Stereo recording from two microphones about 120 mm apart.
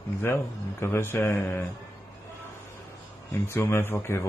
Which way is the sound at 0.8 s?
20° left (ahead or behind).